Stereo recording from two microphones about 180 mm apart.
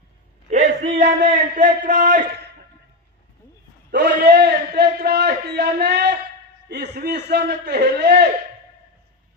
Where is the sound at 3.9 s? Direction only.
70° right (ahead or behind).